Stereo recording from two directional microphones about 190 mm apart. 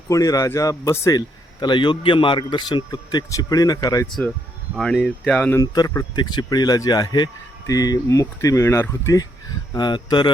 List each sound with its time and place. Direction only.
0.1 s speech: 15° left (ahead or behind)
4.0 s speech: 10° left (ahead or behind)